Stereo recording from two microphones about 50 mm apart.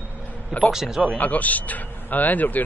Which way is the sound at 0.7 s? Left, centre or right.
Centre.